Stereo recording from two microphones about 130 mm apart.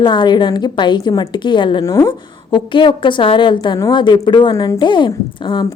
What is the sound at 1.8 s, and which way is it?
Speech, 25° left (ahead or behind).